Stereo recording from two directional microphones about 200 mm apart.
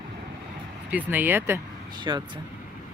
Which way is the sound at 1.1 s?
10° right (ahead or behind).